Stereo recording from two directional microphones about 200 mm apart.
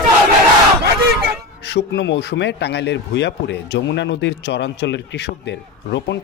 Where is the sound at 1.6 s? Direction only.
60° left (ahead or behind).